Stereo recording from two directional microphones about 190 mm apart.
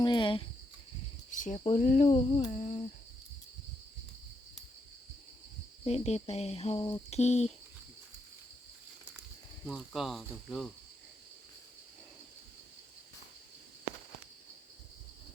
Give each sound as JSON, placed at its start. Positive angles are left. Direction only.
{"t": 0.0, "sound": "cricket", "side_deg": 25}
{"t": 1.3, "sound": "cricket", "side_deg": 40}
{"t": 1.8, "sound": "speech", "side_deg": 40}
{"t": 5.8, "sound": "speech", "side_deg": 35}
{"t": 9.6, "sound": "speech", "side_deg": 0}